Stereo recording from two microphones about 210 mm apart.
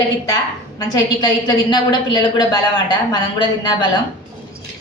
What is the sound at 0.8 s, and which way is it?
A woman's voice, 20° left (ahead or behind).